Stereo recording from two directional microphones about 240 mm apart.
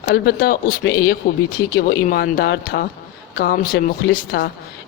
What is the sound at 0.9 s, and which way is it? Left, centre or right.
Speech, centre.